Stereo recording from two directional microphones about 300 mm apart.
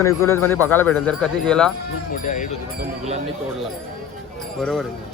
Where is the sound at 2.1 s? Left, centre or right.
Left.